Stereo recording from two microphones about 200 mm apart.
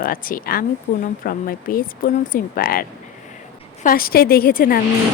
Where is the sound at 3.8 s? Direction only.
45° left (ahead or behind).